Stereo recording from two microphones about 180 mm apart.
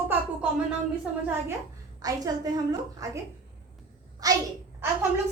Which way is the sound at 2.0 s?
20° right (ahead or behind).